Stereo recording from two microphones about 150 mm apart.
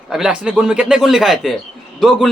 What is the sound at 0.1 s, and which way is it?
Speech, 5° right (ahead or behind).